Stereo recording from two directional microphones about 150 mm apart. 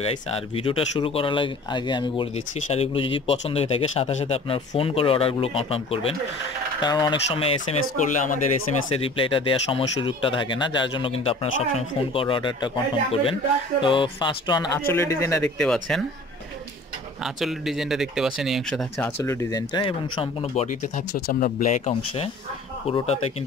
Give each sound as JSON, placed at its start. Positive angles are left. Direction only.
{"t": 0.0, "sound": "speech", "side_deg": 40}
{"t": 2.3, "sound": "speech", "side_deg": 45}
{"t": 6.8, "sound": "speech", "side_deg": 30}
{"t": 8.0, "sound": "speech", "side_deg": 55}
{"t": 8.9, "sound": "speech", "side_deg": 35}
{"t": 15.4, "sound": "speech", "side_deg": 5}
{"t": 17.2, "sound": "speech", "side_deg": 0}
{"t": 20.6, "sound": "speech", "side_deg": 60}
{"t": 22.8, "sound": "speech", "side_deg": 40}